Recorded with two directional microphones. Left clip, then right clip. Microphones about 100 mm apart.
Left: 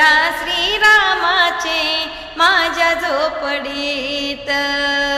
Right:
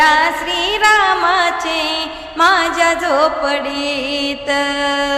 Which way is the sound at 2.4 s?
35° right (ahead or behind).